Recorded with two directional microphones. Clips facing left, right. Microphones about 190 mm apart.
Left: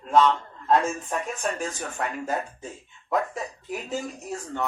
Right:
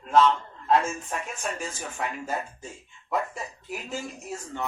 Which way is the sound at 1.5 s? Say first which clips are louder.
Left 3 dB; centre (ahead or behind).